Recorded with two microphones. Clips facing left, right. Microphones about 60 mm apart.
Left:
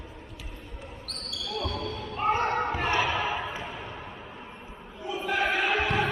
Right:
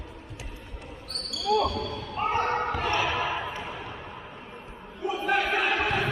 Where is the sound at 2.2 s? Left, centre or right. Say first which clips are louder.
Even; centre.